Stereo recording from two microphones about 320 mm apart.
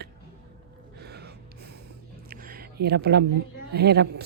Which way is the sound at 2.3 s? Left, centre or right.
Right.